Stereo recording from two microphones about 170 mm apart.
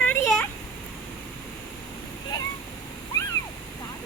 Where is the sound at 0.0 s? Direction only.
10° left (ahead or behind).